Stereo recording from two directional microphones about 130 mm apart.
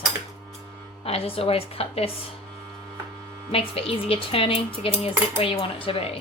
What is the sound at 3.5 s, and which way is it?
A woman's voice, 45° left (ahead or behind).